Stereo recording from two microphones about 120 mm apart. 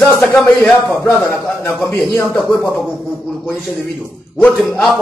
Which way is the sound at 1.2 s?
Centre (ahead or behind).